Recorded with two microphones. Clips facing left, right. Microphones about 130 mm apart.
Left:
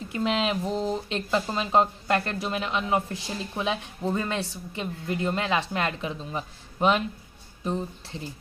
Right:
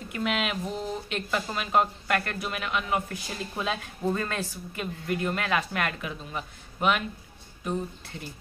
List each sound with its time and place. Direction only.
0.1 s speech: 30° left (ahead or behind)